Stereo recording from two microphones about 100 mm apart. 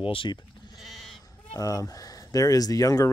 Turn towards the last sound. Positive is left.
turn(degrees=35)  # may be behind; listen again after turning